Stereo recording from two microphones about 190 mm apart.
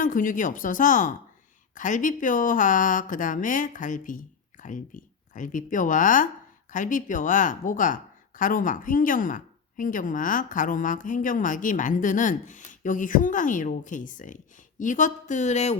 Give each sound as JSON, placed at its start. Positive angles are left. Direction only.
{"t": 0.0, "sound": "speech", "side_deg": 45}